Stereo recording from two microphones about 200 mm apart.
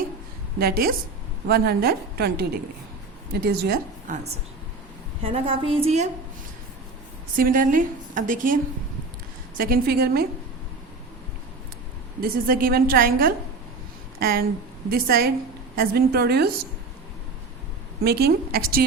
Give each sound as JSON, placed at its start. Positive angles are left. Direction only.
{"t": 0.6, "sound": "a woman's voice", "side_deg": -50}
{"t": 5.2, "sound": "a woman's voice", "side_deg": -25}
{"t": 7.3, "sound": "a woman's voice", "side_deg": -45}
{"t": 9.6, "sound": "a woman's voice", "side_deg": -45}
{"t": 12.2, "sound": "a woman's voice", "side_deg": -45}
{"t": 18.0, "sound": "a woman's voice", "side_deg": -50}